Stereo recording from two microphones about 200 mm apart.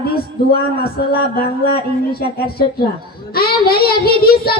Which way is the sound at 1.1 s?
50° left (ahead or behind).